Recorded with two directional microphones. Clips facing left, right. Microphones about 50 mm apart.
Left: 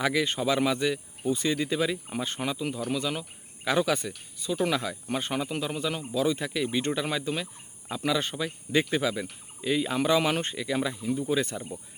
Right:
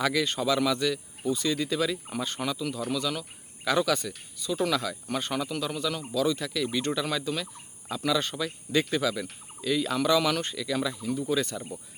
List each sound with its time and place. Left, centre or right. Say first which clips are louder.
0.0 s speech: even; left